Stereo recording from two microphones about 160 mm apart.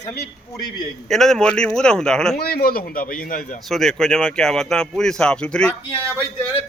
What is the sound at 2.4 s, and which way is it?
A man's voice, 70° left (ahead or behind).